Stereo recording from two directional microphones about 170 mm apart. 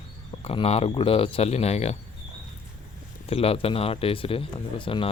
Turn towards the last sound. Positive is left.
turn(degrees=30)  # may be behind; listen again after turning